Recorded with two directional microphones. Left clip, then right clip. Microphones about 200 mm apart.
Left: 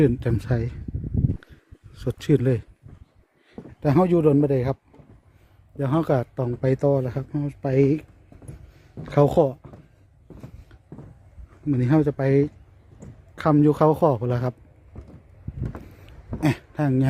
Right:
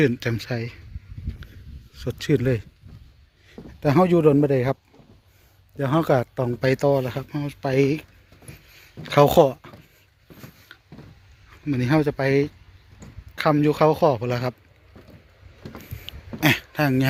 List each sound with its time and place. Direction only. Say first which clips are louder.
0.0 s speech: even; 15° left (ahead or behind)
1.9 s speech: left 1 dB; 25° left (ahead or behind)
9.0 s speech: right 4 dB; 5° left (ahead or behind)
10.7 s a sound: right 10 dB; centre (ahead or behind)
11.7 s speech: even; 10° left (ahead or behind)
16.4 s speech: right 5 dB; 5° left (ahead or behind)